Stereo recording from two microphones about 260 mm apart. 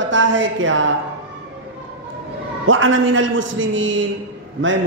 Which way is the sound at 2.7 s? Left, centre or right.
Right.